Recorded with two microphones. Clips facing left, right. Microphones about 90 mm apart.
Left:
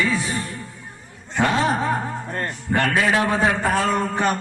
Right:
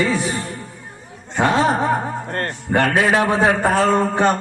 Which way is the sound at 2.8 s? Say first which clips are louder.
Right 3 dB; 45° right (ahead or behind).